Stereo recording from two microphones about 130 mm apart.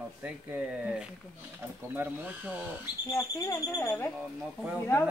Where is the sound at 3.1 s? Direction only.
20° left (ahead or behind).